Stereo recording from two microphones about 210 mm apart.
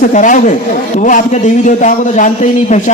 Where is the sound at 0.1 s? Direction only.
35° left (ahead or behind).